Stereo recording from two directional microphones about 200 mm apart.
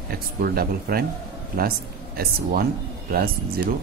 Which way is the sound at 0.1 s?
50° right (ahead or behind).